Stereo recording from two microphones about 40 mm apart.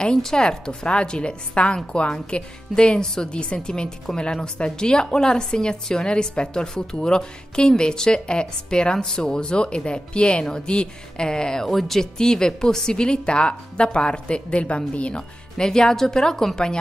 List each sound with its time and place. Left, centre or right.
0.0 s speech: centre